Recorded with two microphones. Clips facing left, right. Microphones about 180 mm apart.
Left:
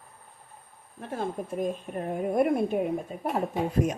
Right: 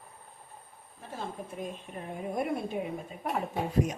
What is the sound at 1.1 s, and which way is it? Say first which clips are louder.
A woman's voice: left 7 dB; 50° left (ahead or behind).